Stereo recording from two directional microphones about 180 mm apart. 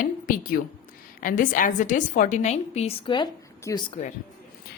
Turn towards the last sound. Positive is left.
turn(degrees=20)  # may be behind; listen again after turning